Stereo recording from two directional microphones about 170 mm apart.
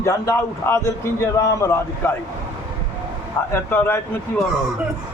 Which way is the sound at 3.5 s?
10° left (ahead or behind).